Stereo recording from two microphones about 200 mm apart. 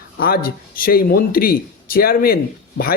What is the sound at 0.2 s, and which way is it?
Speech, 50° left (ahead or behind).